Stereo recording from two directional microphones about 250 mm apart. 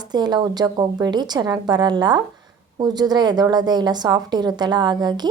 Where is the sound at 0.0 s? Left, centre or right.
Centre.